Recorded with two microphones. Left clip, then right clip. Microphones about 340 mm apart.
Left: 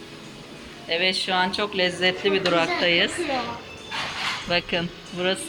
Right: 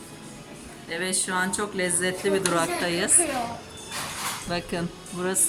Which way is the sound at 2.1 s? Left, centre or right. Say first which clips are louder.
Left 3 dB; left.